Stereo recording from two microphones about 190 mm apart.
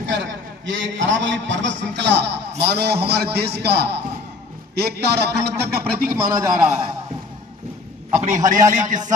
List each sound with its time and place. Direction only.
0.0 s a man's voice: 70° right (ahead or behind); by 6.1 s 50° right (ahead or behind)
6.3 s a man's voice: 15° right (ahead or behind)
8.1 s a man's voice: 40° right (ahead or behind)